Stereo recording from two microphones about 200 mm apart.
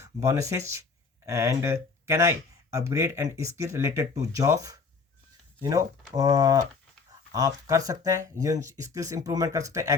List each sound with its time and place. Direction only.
0.0 s speech: 15° right (ahead or behind)